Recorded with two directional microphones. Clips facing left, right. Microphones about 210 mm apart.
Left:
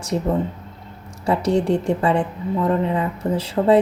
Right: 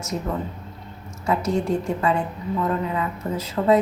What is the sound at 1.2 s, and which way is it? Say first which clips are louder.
A woman's voice: left 4 dB; 30° left (ahead or behind).